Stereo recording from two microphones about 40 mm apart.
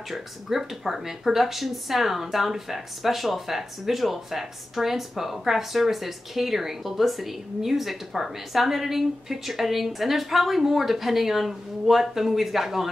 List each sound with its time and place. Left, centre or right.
0.1 s speech: centre